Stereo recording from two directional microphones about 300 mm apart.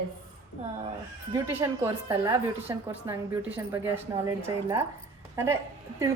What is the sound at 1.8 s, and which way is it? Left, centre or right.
A woman's voice, centre.